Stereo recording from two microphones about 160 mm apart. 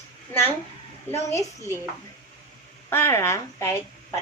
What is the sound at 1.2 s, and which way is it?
Speech, 20° left (ahead or behind).